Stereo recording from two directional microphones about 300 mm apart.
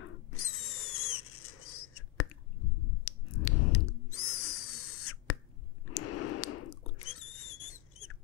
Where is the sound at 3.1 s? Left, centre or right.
Left.